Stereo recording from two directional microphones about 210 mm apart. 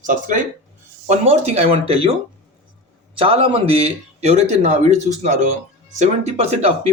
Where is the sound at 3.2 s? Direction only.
25° right (ahead or behind).